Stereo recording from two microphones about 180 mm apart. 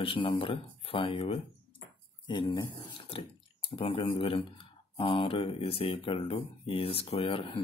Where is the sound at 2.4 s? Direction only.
20° left (ahead or behind).